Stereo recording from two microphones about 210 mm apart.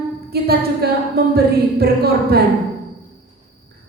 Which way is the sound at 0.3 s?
50° right (ahead or behind).